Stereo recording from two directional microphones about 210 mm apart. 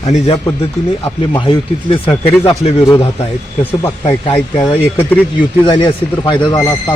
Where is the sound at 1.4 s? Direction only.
25° left (ahead or behind).